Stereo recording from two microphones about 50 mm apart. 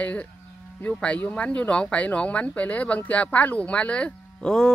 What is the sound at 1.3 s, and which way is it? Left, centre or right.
Speech, left.